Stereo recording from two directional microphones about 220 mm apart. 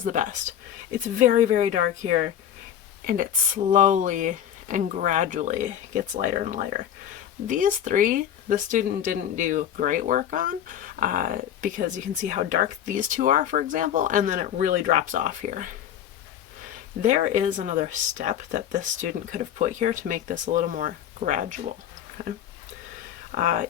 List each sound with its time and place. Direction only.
0.0 s speech: 35° right (ahead or behind)
23.4 s speech: 35° right (ahead or behind)